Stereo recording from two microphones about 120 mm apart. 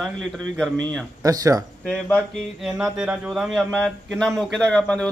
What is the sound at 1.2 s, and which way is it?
Speech, 30° right (ahead or behind).